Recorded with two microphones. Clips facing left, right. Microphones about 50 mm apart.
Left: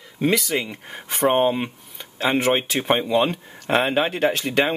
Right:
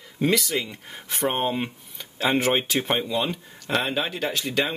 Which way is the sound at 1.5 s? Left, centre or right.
Centre.